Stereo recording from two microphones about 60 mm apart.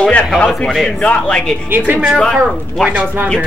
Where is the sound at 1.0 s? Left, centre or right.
Centre.